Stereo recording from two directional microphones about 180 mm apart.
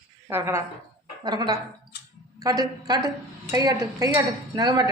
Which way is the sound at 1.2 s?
25° right (ahead or behind).